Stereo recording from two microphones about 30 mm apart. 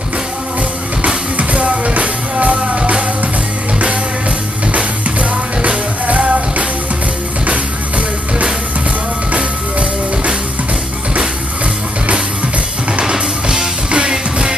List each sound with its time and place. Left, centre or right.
1.3 s music: right
4.7 s music: right
9.3 s music: right
13.0 s music: right
13.8 s music: right